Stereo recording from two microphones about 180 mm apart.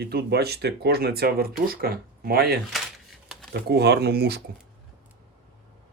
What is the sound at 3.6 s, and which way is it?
Speech, 65° right (ahead or behind).